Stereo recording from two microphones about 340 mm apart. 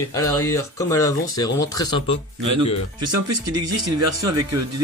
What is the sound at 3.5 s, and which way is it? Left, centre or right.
Speech, right.